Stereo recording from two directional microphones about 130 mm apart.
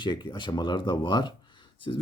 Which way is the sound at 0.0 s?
35° left (ahead or behind).